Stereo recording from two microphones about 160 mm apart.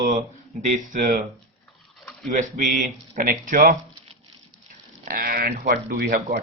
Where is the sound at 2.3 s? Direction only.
55° right (ahead or behind).